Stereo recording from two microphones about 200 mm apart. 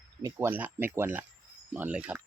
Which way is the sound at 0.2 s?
15° right (ahead or behind).